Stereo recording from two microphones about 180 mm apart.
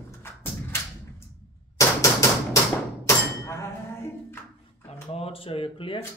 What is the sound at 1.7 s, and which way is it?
Typewriter, 15° left (ahead or behind).